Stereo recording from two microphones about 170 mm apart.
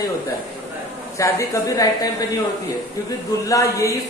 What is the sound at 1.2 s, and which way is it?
Speech, 20° left (ahead or behind).